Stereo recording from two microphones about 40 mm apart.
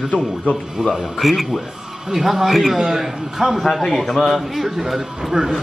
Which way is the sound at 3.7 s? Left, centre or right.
Centre.